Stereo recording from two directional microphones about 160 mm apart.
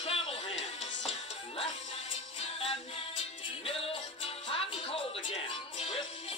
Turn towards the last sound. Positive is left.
turn(degrees=35)  # may be behind; listen again after turning